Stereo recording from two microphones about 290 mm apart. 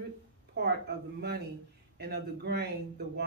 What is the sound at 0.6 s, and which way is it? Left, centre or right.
Speech, right.